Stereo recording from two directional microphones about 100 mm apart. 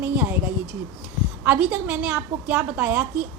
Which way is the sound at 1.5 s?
15° right (ahead or behind).